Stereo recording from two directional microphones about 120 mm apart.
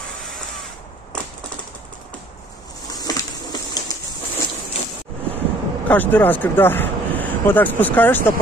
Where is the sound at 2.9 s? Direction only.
30° left (ahead or behind).